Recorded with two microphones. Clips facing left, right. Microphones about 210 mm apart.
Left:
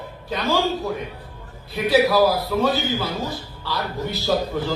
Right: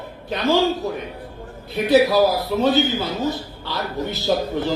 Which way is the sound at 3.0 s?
20° right (ahead or behind).